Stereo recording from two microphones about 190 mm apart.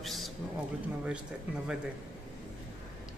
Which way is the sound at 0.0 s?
Centre (ahead or behind).